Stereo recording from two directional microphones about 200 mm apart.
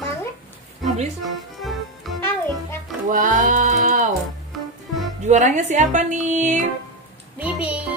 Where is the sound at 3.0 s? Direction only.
40° right (ahead or behind).